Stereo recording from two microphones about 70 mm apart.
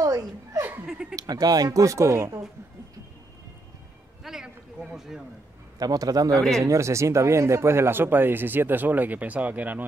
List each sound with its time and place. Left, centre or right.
0.0 s chuckle: right
1.1 s speech: right
4.2 s a sound: centre
4.9 s speech: centre
5.8 s speech: right
6.6 s speech: right